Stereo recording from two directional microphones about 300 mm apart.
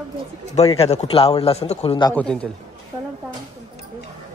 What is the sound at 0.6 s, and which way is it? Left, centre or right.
A man's voice, centre.